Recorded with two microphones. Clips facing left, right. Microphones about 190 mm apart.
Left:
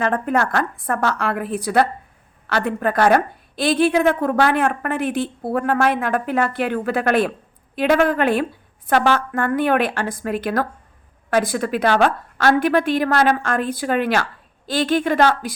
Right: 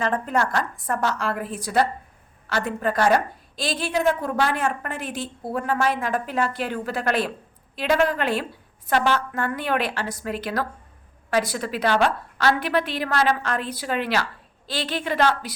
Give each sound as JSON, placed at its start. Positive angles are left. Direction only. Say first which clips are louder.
{"t": 0.0, "sound": "a woman's voice", "louder": "left 4 dB", "side_deg": 60}